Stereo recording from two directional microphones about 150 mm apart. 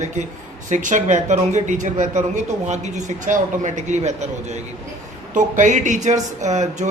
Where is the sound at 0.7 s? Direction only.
55° right (ahead or behind).